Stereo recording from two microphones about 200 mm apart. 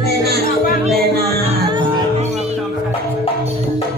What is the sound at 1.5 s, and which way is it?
Music, 30° right (ahead or behind).